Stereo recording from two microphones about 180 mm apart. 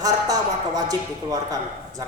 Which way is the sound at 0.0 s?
20° right (ahead or behind).